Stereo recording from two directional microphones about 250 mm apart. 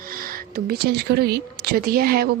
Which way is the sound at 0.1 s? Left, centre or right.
Right.